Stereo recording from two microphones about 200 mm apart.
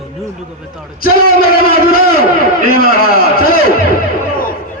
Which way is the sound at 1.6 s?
45° left (ahead or behind).